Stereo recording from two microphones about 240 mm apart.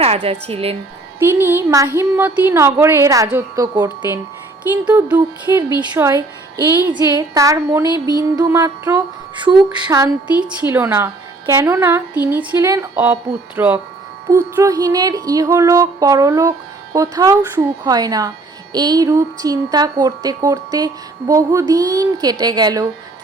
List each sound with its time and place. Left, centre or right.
0.0 s a woman's voice: right
1.2 s speech: centre